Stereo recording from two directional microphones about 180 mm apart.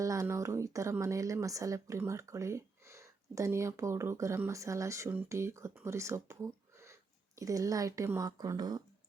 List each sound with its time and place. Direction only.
0.0 s a woman's voice: 20° right (ahead or behind)